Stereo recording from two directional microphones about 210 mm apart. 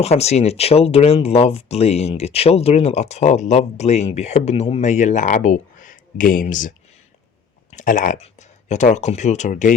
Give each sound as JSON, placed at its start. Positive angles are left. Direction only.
{"t": 0.0, "sound": "speech", "side_deg": 30}
{"t": 7.8, "sound": "speech", "side_deg": 40}